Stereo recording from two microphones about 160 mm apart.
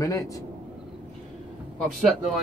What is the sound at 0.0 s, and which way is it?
Speech, 20° left (ahead or behind).